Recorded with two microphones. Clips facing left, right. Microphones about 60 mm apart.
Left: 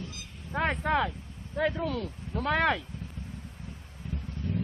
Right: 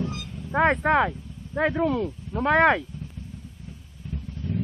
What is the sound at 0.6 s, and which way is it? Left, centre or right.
Speech, right.